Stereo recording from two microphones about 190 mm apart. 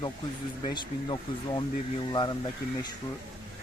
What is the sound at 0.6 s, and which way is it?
Speech, 25° left (ahead or behind).